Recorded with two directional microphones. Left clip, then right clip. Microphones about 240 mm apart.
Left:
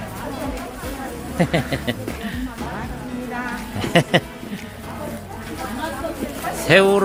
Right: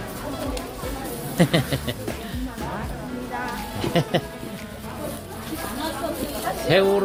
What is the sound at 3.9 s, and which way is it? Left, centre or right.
Speech, left.